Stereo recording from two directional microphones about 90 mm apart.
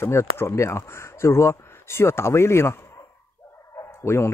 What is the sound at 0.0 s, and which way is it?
Speech, 30° left (ahead or behind).